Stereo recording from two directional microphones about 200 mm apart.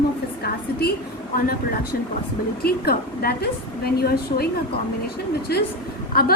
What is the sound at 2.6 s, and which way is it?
A woman's voice, 50° left (ahead or behind).